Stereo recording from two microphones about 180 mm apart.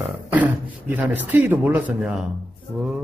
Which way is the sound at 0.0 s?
10° right (ahead or behind).